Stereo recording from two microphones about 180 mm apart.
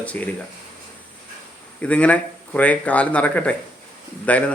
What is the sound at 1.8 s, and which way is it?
A man's voice, 5° left (ahead or behind).